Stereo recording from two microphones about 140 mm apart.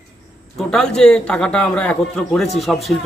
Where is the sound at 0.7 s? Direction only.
5° left (ahead or behind).